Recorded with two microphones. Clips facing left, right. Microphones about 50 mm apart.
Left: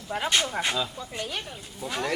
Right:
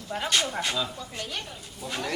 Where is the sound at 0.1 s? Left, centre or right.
Centre.